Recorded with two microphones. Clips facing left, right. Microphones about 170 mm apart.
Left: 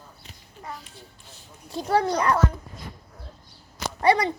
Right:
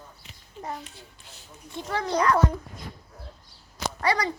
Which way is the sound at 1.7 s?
35° left (ahead or behind).